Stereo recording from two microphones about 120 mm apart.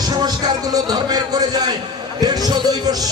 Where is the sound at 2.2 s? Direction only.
35° right (ahead or behind).